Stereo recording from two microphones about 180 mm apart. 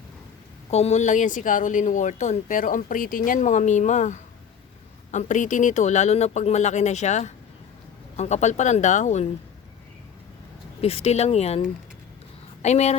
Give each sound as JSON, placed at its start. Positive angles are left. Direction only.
{"t": 0.7, "sound": "speech", "side_deg": 35}
{"t": 10.8, "sound": "speech", "side_deg": 35}